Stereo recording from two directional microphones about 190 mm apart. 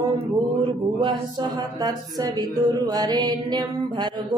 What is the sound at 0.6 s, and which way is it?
Mantra, 25° right (ahead or behind).